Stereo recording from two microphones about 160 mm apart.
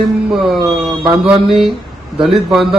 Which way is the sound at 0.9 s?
25° right (ahead or behind).